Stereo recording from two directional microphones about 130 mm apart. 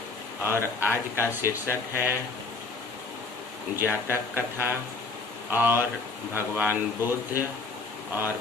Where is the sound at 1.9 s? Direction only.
15° right (ahead or behind).